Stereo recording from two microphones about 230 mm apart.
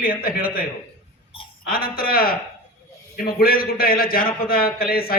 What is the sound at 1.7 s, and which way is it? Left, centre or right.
A man's voice, left.